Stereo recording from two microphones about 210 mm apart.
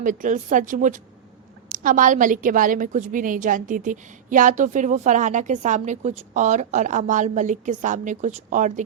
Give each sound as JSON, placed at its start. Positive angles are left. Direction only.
{"t": 0.0, "sound": "a woman's voice", "side_deg": -40}